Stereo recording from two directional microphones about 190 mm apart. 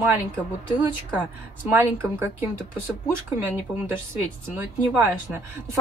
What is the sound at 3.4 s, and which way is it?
Speech, 45° left (ahead or behind).